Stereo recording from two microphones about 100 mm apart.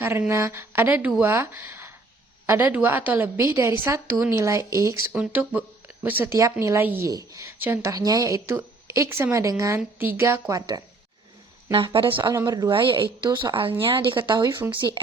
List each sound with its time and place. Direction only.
0.3 s a woman's voice: 30° right (ahead or behind)
3.3 s speech: 30° right (ahead or behind)
5.1 s speech: 15° right (ahead or behind)
6.3 s speech: 30° right (ahead or behind)
7.1 s speech: 35° right (ahead or behind)
7.6 s speech: 20° right (ahead or behind)
7.9 s speech: 40° right (ahead or behind)
10.0 s speech: 25° right (ahead or behind)
10.5 s speech: 40° right (ahead or behind)
11.9 s speech: 55° right (ahead or behind)
12.3 s speech: 35° right (ahead or behind)
12.7 s speech: 55° right (ahead or behind)
14.3 s speech: 45° right (ahead or behind)